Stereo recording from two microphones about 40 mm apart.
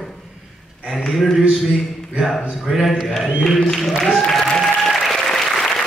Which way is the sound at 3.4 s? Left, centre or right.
Centre.